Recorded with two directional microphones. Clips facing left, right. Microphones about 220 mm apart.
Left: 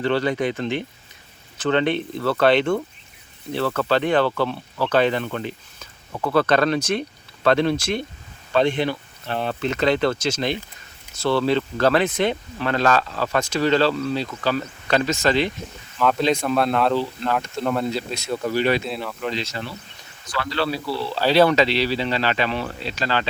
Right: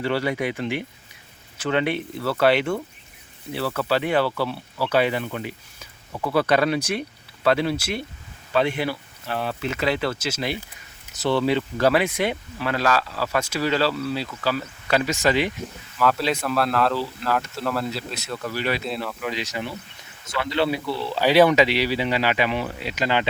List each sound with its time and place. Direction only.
0.0 s speech: 10° right (ahead or behind)
18.3 s speech: 25° left (ahead or behind)
18.6 s speech: centre (ahead or behind)
19.3 s speech: 15° right (ahead or behind)